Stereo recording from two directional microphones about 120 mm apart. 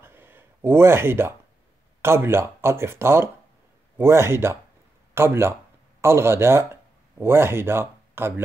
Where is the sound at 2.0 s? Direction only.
20° right (ahead or behind).